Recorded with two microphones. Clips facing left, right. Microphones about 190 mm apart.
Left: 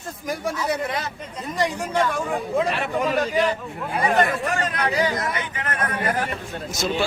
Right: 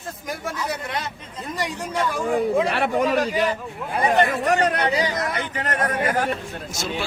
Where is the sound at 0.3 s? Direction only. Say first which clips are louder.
Left 4 dB; centre (ahead or behind).